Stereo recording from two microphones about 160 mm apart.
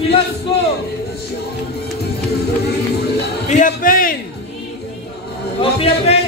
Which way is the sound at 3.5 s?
55° left (ahead or behind).